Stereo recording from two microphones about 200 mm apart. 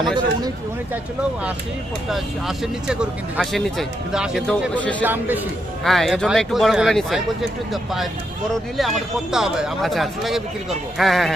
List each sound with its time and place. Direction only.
0.0 s speech: 20° right (ahead or behind)
2.0 s speech: centre (ahead or behind)
5.0 s speech: 10° right (ahead or behind)
9.3 s speech: centre (ahead or behind)